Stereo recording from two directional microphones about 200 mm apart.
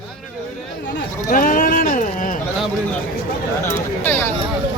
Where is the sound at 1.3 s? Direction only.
45° left (ahead or behind).